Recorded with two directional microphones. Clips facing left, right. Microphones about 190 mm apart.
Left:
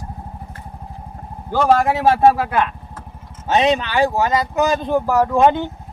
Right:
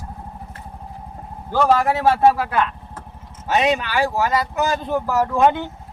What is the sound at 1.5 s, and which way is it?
Speech, 10° left (ahead or behind).